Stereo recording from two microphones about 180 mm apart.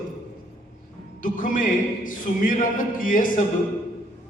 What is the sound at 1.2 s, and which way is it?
A man's voice, 50° left (ahead or behind).